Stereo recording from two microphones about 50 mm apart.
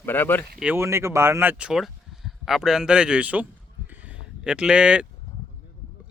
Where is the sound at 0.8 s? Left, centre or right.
Right.